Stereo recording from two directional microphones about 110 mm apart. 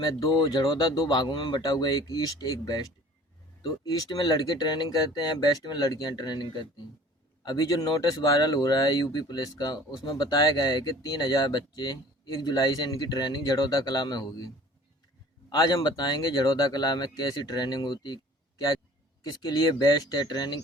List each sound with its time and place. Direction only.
0.0 s speech: 40° left (ahead or behind)
19.2 s speech: 35° left (ahead or behind)